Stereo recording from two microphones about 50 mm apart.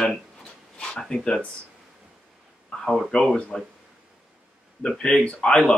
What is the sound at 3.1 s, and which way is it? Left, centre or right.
Speech, centre.